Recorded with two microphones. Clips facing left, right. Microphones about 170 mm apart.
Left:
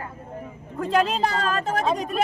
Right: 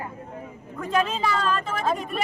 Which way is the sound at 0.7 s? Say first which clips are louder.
Left 3 dB; 35° left (ahead or behind).